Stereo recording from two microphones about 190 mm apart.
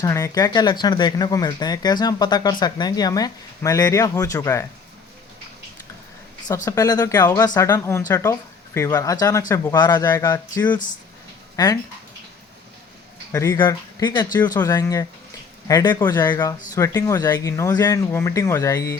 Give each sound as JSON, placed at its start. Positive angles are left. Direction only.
{"t": 0.0, "sound": "speech", "side_deg": 15}
{"t": 6.7, "sound": "speech", "side_deg": 20}
{"t": 13.3, "sound": "speech", "side_deg": 15}